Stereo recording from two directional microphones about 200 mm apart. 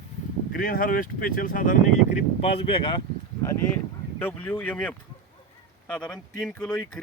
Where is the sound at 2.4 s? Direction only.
30° left (ahead or behind).